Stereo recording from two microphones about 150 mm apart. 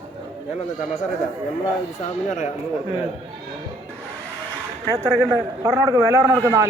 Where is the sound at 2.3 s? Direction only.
55° left (ahead or behind).